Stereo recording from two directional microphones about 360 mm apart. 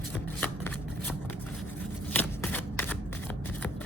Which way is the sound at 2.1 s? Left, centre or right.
Centre.